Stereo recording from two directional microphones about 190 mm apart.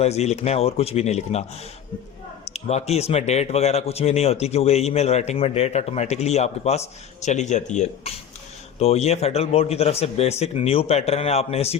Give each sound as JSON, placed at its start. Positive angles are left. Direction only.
{"t": 0.0, "sound": "speech", "side_deg": 35}